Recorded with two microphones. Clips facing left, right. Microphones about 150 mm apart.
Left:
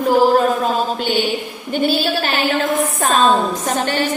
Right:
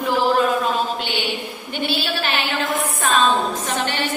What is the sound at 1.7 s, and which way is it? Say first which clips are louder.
A woman's voice: left 7 dB; 45° left (ahead or behind).